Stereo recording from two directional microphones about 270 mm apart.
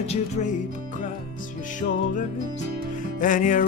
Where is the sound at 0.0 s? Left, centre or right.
Left.